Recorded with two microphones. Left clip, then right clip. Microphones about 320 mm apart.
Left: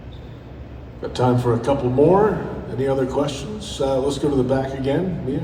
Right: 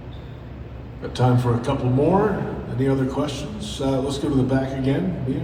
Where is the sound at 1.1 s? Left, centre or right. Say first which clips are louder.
Left 3 dB; left.